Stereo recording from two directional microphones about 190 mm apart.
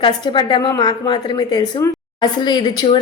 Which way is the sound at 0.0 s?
25° left (ahead or behind).